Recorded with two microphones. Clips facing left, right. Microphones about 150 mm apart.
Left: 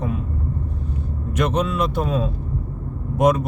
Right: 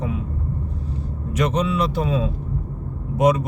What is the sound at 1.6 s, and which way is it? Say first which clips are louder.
Speech: even; 50° left (ahead or behind).